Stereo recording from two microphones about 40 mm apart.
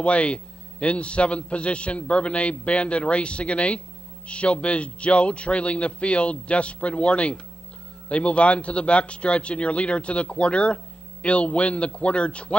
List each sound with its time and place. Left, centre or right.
0.0 s a man's voice: left